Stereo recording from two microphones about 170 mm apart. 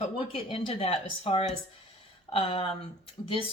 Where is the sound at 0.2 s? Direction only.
35° left (ahead or behind).